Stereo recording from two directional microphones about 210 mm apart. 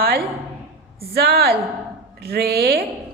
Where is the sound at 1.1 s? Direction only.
50° right (ahead or behind).